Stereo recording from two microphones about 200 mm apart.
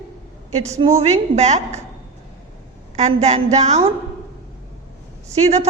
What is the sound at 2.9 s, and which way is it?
Speech, 35° right (ahead or behind).